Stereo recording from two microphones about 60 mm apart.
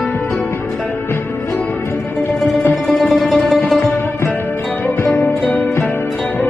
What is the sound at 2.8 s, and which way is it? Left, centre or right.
Music, centre.